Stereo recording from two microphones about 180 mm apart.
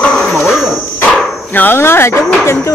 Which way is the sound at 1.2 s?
10° left (ahead or behind).